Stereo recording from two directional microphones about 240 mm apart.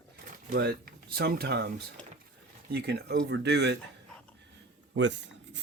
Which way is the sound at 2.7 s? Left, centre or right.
Right.